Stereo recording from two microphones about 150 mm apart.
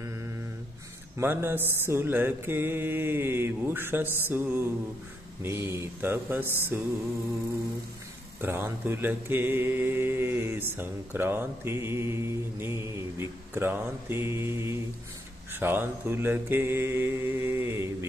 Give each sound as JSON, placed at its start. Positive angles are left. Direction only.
{"t": 1.1, "sound": "speech", "side_deg": -15}
{"t": 8.4, "sound": "speech", "side_deg": -15}